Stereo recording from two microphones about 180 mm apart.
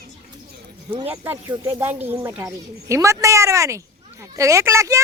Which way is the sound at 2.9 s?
15° right (ahead or behind).